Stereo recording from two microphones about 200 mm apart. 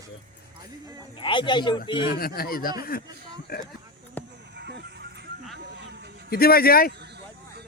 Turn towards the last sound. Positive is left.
turn(degrees=50)  # may be behind; listen again after turning